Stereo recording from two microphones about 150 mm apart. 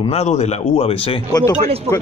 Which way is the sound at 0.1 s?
45° left (ahead or behind).